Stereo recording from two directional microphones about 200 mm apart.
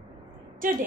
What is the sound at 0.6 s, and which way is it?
Speech, 45° right (ahead or behind).